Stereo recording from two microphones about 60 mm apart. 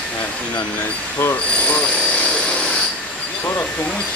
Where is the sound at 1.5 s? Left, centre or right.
Left.